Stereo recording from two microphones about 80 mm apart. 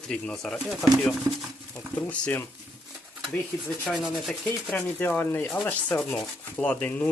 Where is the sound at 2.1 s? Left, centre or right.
Left.